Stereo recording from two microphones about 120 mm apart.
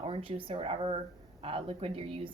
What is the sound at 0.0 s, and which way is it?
Speech, 50° right (ahead or behind).